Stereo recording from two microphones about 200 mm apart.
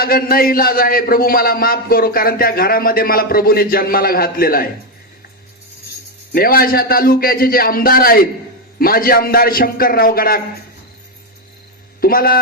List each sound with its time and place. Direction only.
0.0 s speech: 50° left (ahead or behind)
6.3 s speech: 45° left (ahead or behind)
11.9 s speech: 50° left (ahead or behind)